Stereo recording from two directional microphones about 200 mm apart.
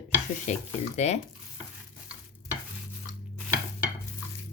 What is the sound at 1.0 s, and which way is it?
Speech, 35° left (ahead or behind).